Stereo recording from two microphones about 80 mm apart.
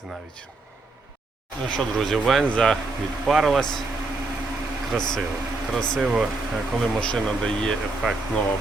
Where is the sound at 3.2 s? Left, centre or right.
Centre.